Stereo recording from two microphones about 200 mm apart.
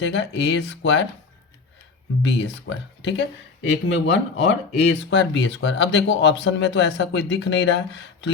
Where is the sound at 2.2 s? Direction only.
60° left (ahead or behind).